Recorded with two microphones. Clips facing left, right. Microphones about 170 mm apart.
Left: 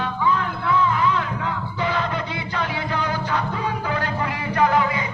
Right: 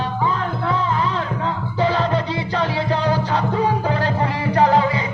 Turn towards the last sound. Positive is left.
turn(degrees=-30)  # may be behind; listen again after turning